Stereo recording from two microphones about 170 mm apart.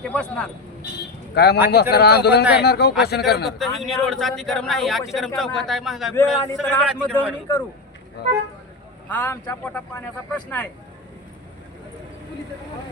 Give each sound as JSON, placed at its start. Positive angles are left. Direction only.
{"t": 0.1, "sound": "a man's voice", "side_deg": 5}
{"t": 1.4, "sound": "speech", "side_deg": 70}
{"t": 3.6, "sound": "a man's voice", "side_deg": 0}
{"t": 6.4, "sound": "a man's voice", "side_deg": 15}
{"t": 8.2, "sound": "speech", "side_deg": 70}
{"t": 9.0, "sound": "a man's voice", "side_deg": 10}